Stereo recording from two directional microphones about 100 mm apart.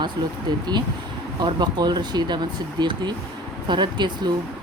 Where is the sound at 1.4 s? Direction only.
45° right (ahead or behind).